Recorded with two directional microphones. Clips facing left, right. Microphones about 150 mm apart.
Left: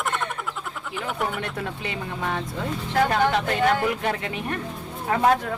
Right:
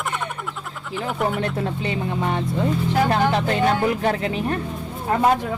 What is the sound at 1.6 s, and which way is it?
Speech, 25° right (ahead or behind).